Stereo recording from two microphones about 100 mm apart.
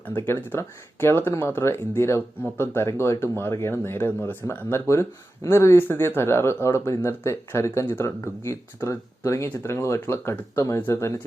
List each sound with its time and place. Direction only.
0.1 s speech: 25° left (ahead or behind)